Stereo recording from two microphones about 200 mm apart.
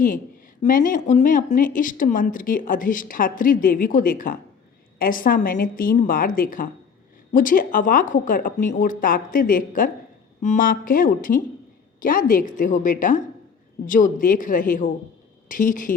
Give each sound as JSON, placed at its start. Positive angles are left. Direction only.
{"t": 0.6, "sound": "a woman's voice", "side_deg": 40}